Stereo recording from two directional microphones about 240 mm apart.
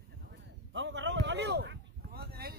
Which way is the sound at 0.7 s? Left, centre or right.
Right.